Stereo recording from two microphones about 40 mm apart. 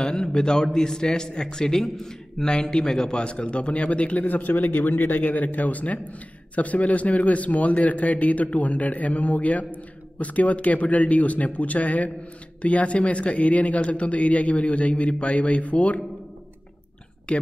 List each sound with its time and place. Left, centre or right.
0.0 s a man's voice: centre; by 16.0 s left
17.3 s speech: left